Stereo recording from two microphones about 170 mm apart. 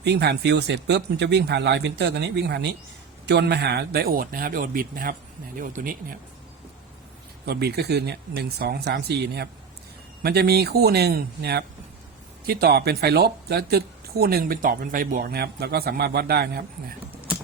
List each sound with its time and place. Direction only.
0.0 s speech: 75° right (ahead or behind); by 6.1 s 55° right (ahead or behind)
7.4 s speech: 70° right (ahead or behind)